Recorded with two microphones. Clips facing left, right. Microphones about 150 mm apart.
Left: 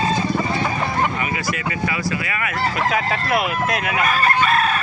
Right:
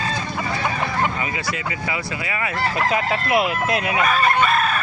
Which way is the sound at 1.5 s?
25° right (ahead or behind).